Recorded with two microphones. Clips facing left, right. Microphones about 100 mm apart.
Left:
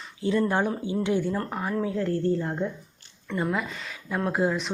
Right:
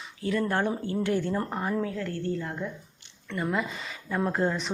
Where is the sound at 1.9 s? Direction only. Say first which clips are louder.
Left 6 dB; 35° left (ahead or behind).